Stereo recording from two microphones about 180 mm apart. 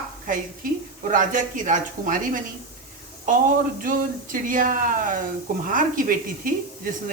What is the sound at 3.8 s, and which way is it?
Speech, 50° right (ahead or behind).